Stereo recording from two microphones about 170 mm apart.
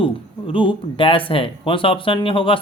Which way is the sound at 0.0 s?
30° left (ahead or behind).